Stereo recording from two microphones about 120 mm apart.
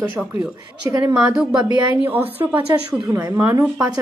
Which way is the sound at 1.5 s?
35° right (ahead or behind).